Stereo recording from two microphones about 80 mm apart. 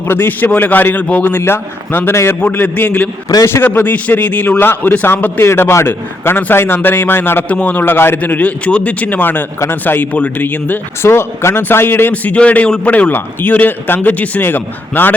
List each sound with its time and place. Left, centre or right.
0.1 s speech: left